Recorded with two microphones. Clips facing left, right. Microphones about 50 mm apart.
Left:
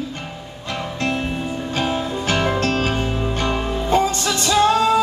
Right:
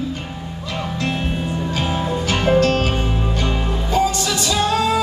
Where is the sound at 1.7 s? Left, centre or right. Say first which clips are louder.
Left 1 dB; left.